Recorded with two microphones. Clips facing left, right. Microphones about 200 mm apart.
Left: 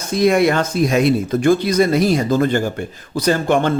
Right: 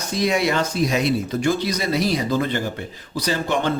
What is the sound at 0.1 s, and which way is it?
Speech, 55° left (ahead or behind).